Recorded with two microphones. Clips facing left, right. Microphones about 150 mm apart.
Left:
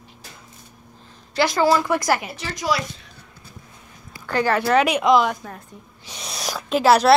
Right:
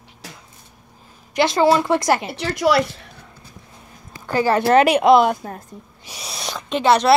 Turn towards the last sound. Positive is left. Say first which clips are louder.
# left 1 dB
turn(degrees=5)  # may be behind; listen again after turning